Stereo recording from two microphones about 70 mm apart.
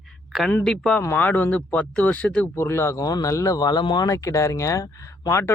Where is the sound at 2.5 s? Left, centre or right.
Left.